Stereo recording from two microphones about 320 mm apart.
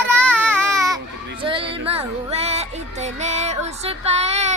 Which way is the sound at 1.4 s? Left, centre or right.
Centre.